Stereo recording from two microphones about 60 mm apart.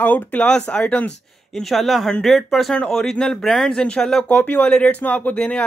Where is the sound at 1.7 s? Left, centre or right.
Centre.